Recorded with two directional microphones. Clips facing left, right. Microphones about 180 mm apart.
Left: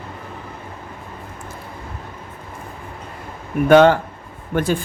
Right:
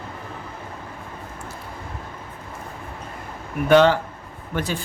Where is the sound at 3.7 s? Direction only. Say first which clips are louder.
Left 4 dB; 50° left (ahead or behind).